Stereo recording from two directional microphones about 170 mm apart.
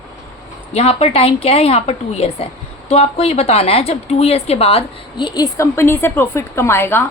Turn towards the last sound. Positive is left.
turn(degrees=15)  # may be behind; listen again after turning